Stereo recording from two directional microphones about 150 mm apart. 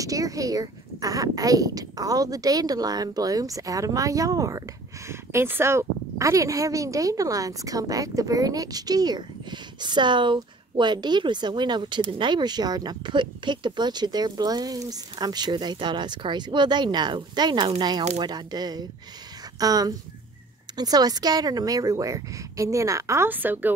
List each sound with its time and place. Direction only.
0.0 s speech: 20° right (ahead or behind)